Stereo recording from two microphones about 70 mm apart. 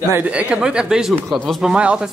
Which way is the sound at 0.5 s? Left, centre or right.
Centre.